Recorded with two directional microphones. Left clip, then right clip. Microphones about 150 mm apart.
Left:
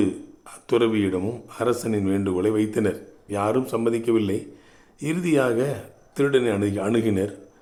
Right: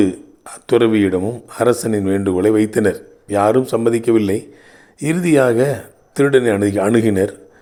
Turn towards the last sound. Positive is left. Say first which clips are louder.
# right 8 dB
turn(degrees=-40)  # may be behind; listen again after turning